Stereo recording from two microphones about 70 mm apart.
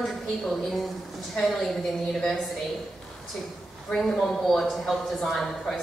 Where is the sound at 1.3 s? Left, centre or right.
Centre.